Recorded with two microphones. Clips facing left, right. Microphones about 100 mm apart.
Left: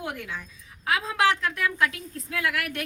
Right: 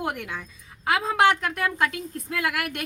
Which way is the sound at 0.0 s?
60° right (ahead or behind).